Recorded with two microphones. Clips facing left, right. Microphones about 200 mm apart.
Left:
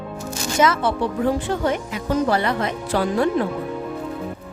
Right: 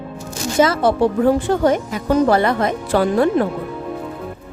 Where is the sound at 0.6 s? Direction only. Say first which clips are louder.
Right 4 dB; 30° right (ahead or behind).